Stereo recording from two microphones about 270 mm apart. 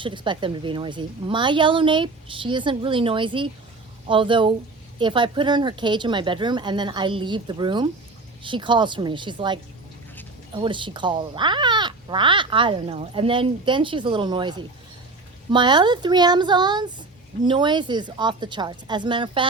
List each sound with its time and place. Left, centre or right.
0.0 s speech: centre